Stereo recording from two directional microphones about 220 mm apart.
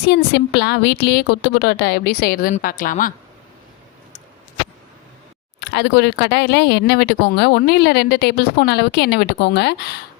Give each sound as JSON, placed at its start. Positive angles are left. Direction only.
{"t": 0.0, "sound": "speech", "side_deg": 50}
{"t": 5.5, "sound": "speech", "side_deg": 50}